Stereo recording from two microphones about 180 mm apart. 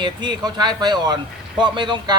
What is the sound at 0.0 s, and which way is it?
A man's voice, 25° right (ahead or behind).